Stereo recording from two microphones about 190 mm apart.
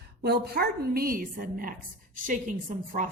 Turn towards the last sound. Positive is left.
turn(degrees=-40)  # may be behind; listen again after turning